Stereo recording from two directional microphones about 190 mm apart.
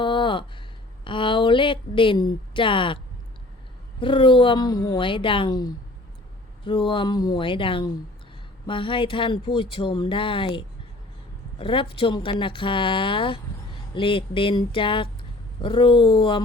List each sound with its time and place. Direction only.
0.0 s a sound: 25° left (ahead or behind)
1.0 s speech: 25° left (ahead or behind)
4.0 s speech: 25° left (ahead or behind)